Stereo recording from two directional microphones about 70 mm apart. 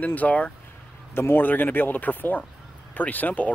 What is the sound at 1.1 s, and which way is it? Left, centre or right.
Speech, left.